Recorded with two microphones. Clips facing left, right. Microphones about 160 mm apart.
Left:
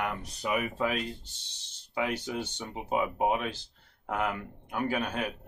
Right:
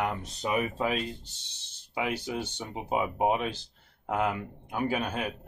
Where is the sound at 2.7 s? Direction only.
25° right (ahead or behind).